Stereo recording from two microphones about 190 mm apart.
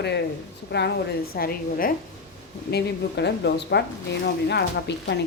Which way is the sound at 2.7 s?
65° left (ahead or behind).